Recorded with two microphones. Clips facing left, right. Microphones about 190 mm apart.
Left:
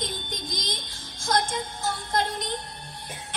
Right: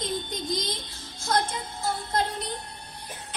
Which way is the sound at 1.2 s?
90° left.